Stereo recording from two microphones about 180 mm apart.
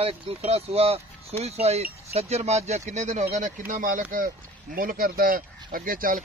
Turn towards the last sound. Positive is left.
turn(degrees=-50)  # may be behind; listen again after turning